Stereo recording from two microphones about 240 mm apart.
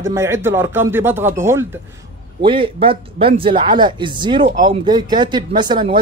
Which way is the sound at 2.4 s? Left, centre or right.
Right.